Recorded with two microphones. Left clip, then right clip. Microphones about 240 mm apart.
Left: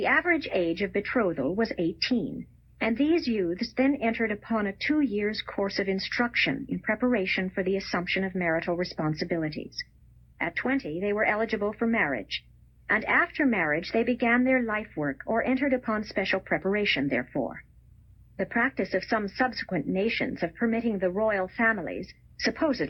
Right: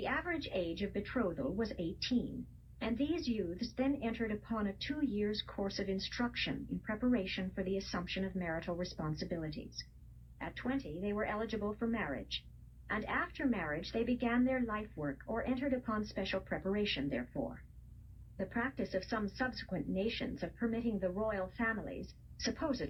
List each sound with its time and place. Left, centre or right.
0.0 s a woman's voice: left